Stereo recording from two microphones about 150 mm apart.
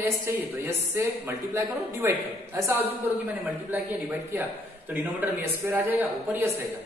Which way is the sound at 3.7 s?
15° right (ahead or behind).